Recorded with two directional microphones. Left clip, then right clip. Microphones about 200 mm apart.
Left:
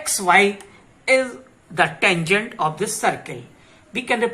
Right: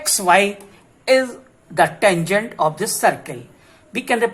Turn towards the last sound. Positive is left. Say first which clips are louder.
# right 2 dB
turn(degrees=-50)  # may be behind; listen again after turning